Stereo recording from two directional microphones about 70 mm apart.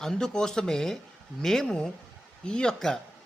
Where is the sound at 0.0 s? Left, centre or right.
Centre.